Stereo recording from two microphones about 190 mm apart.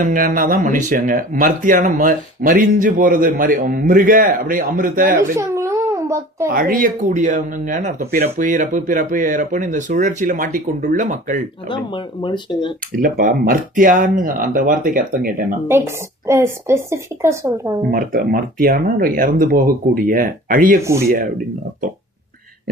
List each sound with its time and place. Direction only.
0.0 s speech: 45° right (ahead or behind)
5.4 s babbling: 15° right (ahead or behind)
6.5 s speech: 45° right (ahead or behind)
11.7 s speech: 25° left (ahead or behind)
13.0 s speech: 45° right (ahead or behind)
16.2 s a woman's voice: 15° right (ahead or behind)
17.9 s speech: 50° right (ahead or behind)
20.8 s a woman's voice: 15° right (ahead or behind)